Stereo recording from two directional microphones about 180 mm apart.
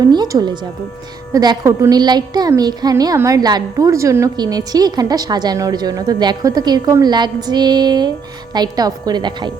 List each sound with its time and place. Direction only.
0.0 s a woman's voice: 20° right (ahead or behind)